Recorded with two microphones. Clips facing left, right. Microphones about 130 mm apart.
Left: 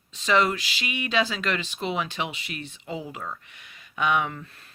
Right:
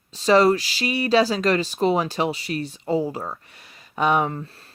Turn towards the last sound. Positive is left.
turn(degrees=-35)  # may be behind; listen again after turning